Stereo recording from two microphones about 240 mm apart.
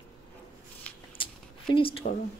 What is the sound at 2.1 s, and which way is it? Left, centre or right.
Speech, left.